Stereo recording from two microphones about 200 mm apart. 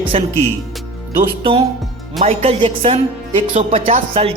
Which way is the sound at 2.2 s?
30° right (ahead or behind).